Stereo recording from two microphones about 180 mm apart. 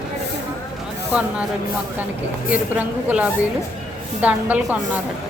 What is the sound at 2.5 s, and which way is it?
A woman's voice, 5° right (ahead or behind).